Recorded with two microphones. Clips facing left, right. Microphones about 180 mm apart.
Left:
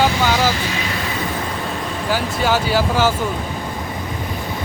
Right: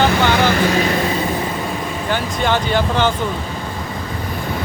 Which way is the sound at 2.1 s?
5° left (ahead or behind).